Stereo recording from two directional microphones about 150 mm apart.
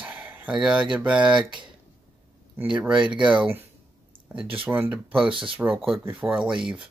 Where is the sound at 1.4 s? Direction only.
30° right (ahead or behind).